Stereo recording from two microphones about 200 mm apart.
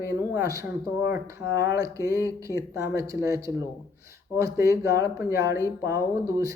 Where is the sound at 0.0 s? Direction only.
15° right (ahead or behind).